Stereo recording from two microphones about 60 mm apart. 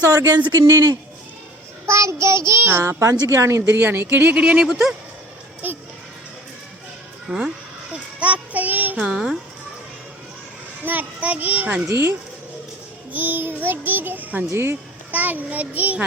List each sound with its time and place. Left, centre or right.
0.1 s speech: right
0.6 s speech: right
1.9 s child singing: right
3.0 s speech: right
3.8 s child singing: right
4.4 s speech: centre
5.6 s a child's voice: right
7.3 s speech: centre
8.2 s child singing: right
9.0 s speech: centre
10.8 s a child's voice: right
13.1 s child singing: right
14.5 s child singing: right
15.1 s a child's voice: right